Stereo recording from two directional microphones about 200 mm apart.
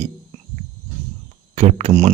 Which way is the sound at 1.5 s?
35° right (ahead or behind).